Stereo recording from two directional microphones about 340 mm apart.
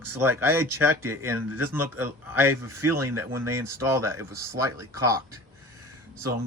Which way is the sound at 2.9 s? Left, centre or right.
Right.